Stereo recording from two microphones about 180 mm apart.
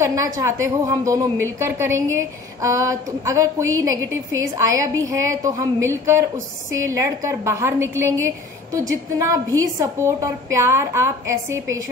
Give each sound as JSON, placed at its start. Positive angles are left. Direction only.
{"t": 0.0, "sound": "a woman's voice", "side_deg": -15}